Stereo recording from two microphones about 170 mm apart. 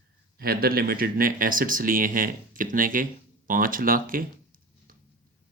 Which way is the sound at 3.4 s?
55° right (ahead or behind).